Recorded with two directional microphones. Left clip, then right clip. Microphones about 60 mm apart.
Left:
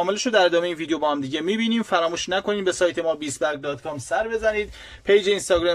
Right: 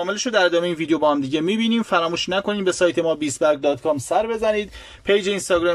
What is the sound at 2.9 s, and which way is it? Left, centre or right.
Speech, right.